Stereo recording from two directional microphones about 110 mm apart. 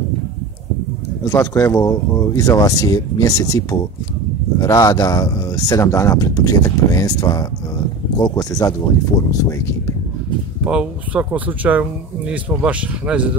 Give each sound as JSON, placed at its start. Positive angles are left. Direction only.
{"t": 1.2, "sound": "speech", "side_deg": 20}
{"t": 10.6, "sound": "speech", "side_deg": -10}